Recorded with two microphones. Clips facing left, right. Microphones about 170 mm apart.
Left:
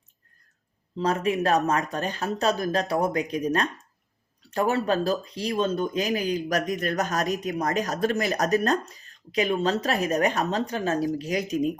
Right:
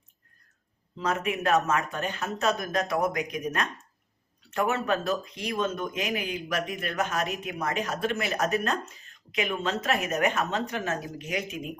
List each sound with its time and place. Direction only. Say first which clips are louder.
0.9 s speech: left 5 dB; 35° left (ahead or behind)